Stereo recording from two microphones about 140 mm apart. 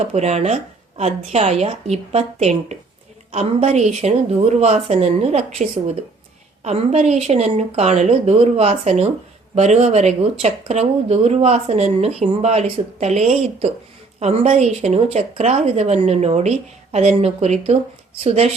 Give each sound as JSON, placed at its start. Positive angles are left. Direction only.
{"t": 0.0, "sound": "speech", "side_deg": -50}